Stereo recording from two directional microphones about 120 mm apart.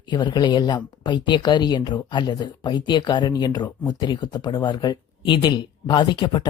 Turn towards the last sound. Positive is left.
turn(degrees=40)  # may be behind; listen again after turning